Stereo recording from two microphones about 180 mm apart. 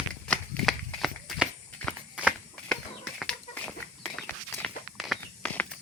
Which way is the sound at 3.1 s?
5° left (ahead or behind).